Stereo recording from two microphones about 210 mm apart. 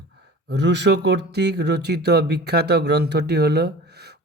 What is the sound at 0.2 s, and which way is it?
Speech, 50° right (ahead or behind).